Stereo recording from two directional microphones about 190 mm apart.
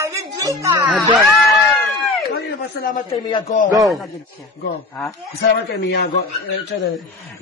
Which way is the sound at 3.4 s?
45° left (ahead or behind).